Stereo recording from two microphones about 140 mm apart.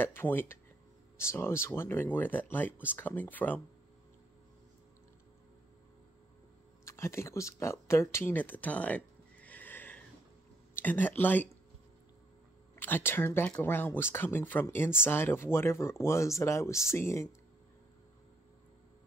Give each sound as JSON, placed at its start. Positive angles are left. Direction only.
{"t": 0.0, "sound": "speech", "side_deg": 15}
{"t": 6.8, "sound": "speech", "side_deg": 20}
{"t": 12.7, "sound": "speech", "side_deg": 15}